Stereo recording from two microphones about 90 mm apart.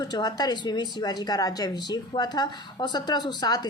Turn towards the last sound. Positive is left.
turn(degrees=50)  # may be behind; listen again after turning